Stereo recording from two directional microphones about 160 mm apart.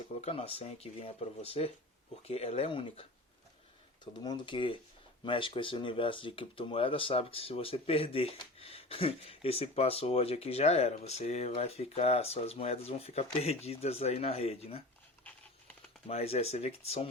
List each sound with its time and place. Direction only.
0.2 s speech: 40° left (ahead or behind)
16.0 s speech: 40° left (ahead or behind)